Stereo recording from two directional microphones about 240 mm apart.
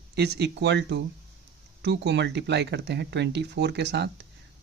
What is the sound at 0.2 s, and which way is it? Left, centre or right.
Speech, right.